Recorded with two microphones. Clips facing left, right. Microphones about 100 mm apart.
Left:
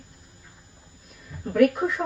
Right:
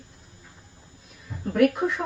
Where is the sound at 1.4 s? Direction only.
Centre (ahead or behind).